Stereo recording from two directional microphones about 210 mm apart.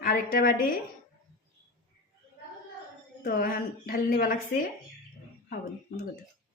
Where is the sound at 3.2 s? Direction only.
40° left (ahead or behind).